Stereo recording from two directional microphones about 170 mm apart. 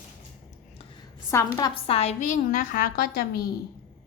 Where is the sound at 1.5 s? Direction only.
25° left (ahead or behind); by 3.4 s 60° left (ahead or behind).